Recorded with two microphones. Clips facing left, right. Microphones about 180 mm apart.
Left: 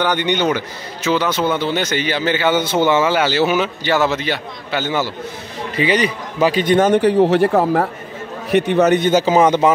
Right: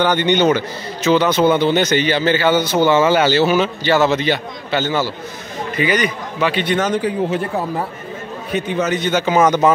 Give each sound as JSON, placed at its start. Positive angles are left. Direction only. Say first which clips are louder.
{"t": 0.0, "sound": "a man's voice", "louder": "right 3 dB", "side_deg": 15}
{"t": 3.0, "sound": "a man's voice", "louder": "right 2 dB", "side_deg": 5}
{"t": 5.8, "sound": "a man's voice", "louder": "left 1 dB", "side_deg": 30}
{"t": 6.9, "sound": "a man's voice", "louder": "left 6 dB", "side_deg": 70}
{"t": 8.5, "sound": "a man's voice", "louder": "left 6 dB", "side_deg": 70}
{"t": 9.1, "sound": "a man's voice", "louder": "left 3 dB", "side_deg": 35}
{"t": 9.4, "sound": "a man's voice", "louder": "right 2 dB", "side_deg": 15}